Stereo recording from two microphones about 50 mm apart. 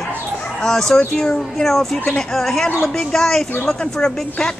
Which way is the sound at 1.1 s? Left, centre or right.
Centre.